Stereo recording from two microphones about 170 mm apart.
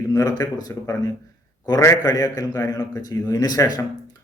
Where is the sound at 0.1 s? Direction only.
20° left (ahead or behind).